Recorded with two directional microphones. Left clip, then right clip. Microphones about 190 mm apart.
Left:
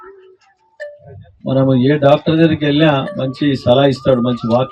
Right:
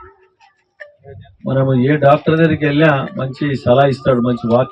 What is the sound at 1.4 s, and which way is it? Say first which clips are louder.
Speech: left 2 dB; 5° right (ahead or behind).